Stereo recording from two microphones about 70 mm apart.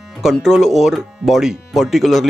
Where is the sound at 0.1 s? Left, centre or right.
Centre.